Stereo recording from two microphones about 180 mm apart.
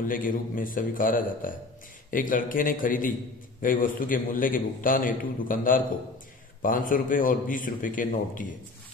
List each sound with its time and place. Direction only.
0.0 s a man's voice: 50° left (ahead or behind)